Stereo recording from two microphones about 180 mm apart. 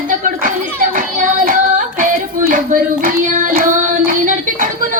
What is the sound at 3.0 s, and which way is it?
Child singing, 45° right (ahead or behind).